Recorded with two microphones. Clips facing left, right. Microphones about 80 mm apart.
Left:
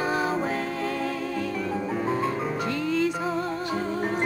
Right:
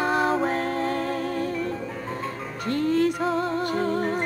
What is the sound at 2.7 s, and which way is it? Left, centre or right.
Music, right.